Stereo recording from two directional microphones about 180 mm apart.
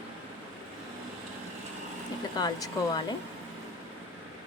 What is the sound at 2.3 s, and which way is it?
Speech, 25° left (ahead or behind).